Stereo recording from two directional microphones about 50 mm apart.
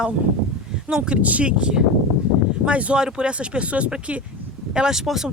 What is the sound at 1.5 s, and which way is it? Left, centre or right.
Speech, centre.